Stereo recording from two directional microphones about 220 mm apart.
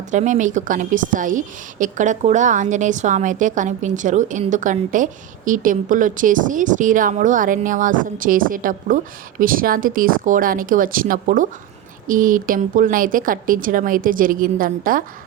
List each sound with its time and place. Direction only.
0.1 s a woman's voice: 35° right (ahead or behind)